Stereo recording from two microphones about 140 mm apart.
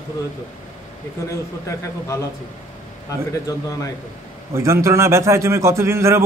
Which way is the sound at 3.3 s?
25° left (ahead or behind).